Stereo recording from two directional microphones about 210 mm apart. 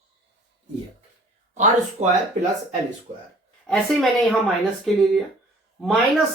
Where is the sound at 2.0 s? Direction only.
35° right (ahead or behind).